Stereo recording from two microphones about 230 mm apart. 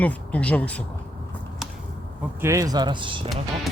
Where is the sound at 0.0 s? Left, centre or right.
Centre.